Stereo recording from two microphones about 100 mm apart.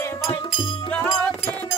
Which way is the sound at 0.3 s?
55° left (ahead or behind).